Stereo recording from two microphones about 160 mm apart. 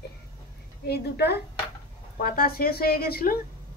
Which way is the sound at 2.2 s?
60° left (ahead or behind).